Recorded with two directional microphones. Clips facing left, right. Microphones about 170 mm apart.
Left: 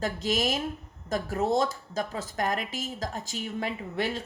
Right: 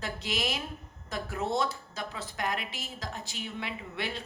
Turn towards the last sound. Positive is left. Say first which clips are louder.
# left 6 dB
turn(degrees=40)  # may be behind; listen again after turning